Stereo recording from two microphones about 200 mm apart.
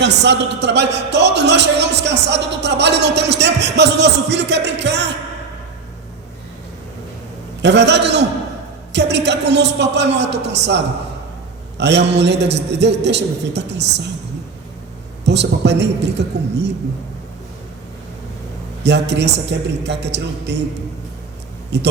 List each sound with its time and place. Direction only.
0.0 s a man's voice: 60° right (ahead or behind)
7.6 s a man's voice: 60° right (ahead or behind)
11.8 s a man's voice: 60° right (ahead or behind)
15.2 s a man's voice: 60° right (ahead or behind)
18.8 s a man's voice: 60° right (ahead or behind)
21.7 s a man's voice: 60° right (ahead or behind)